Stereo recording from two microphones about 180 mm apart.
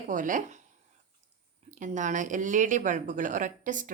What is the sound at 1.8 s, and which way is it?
A woman's voice, 45° right (ahead or behind).